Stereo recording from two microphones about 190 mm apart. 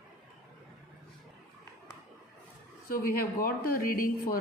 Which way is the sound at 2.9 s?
50° left (ahead or behind).